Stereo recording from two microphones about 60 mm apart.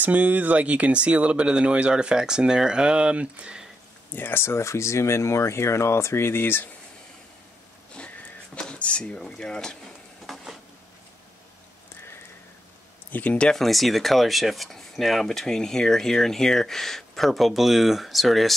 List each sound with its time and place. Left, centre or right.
0.0 s speech: right
4.1 s speech: left
8.5 s speech: centre
10.2 s a sound: centre
13.1 s speech: left
13.5 s speech: centre